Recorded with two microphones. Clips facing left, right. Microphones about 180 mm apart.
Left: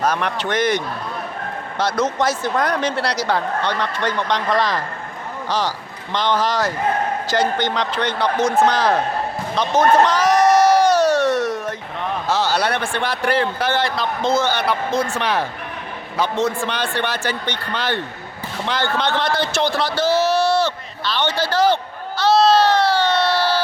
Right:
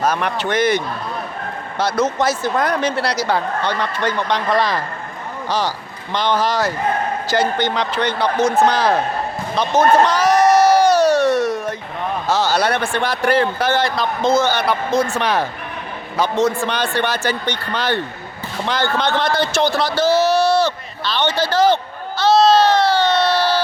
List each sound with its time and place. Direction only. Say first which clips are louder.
0.0 s speech: right 1 dB; 5° right (ahead or behind)
1.8 s speech: right 2 dB; 5° right (ahead or behind)
9.6 s crowd: right 1 dB; 10° right (ahead or behind)
12.3 s a man's voice: right 2 dB; 45° right (ahead or behind)
21.1 s a man's voice: right 2 dB; 20° right (ahead or behind)
22.2 s a sound: right 2 dB; 20° right (ahead or behind)